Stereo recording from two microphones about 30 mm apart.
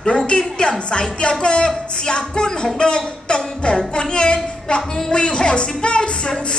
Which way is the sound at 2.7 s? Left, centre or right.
Left.